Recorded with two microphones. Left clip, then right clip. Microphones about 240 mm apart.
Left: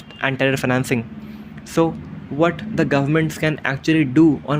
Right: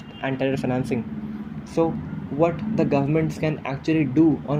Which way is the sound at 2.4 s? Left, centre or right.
Left.